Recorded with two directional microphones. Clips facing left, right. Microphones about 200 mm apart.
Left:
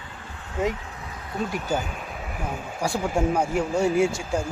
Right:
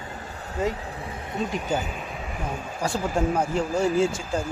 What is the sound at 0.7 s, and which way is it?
Speech, 30° right (ahead or behind).